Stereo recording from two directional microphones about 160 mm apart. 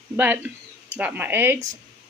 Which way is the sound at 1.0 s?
10° right (ahead or behind).